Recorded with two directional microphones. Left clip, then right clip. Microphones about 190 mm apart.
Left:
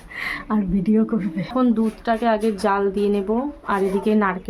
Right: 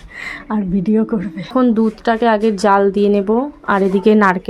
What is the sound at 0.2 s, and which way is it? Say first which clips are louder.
Speech: right 2 dB; 5° right (ahead or behind).